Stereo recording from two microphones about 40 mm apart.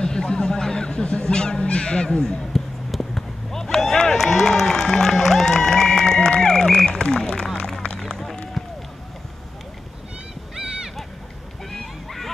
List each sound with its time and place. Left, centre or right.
0.0 s honk: centre
2.5 s run: centre
11.7 s a sound: centre